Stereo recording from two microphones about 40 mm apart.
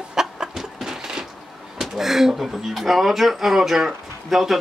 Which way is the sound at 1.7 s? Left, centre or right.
Centre.